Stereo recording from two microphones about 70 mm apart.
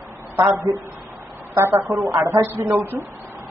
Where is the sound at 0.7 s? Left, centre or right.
Right.